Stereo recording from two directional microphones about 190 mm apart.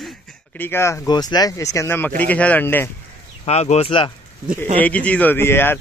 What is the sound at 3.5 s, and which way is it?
Speech, 35° left (ahead or behind).